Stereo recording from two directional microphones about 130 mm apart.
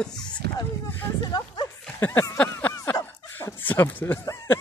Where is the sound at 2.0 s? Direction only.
15° left (ahead or behind).